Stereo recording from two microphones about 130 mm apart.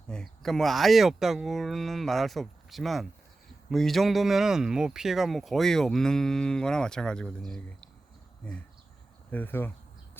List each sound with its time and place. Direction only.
0.1 s speech: 5° left (ahead or behind)
9.3 s speech: 15° left (ahead or behind)